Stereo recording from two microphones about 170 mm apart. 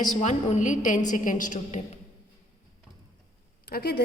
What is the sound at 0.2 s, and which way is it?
A woman's voice, 45° left (ahead or behind).